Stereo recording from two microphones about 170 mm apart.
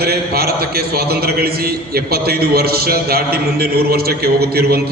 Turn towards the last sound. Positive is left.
turn(degrees=-65)  # may be behind; listen again after turning